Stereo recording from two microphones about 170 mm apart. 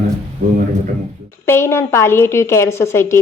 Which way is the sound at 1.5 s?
15° left (ahead or behind).